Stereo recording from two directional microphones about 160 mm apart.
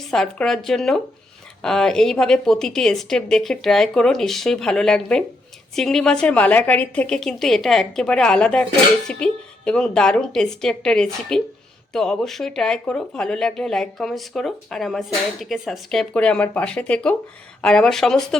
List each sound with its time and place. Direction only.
0.1 s speech: 5° left (ahead or behind)